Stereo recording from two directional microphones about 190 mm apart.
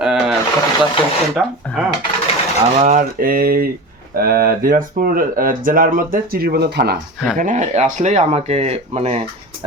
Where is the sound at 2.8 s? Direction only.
45° right (ahead or behind).